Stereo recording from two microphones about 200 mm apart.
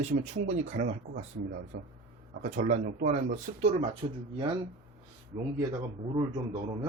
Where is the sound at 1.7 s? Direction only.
70° right (ahead or behind).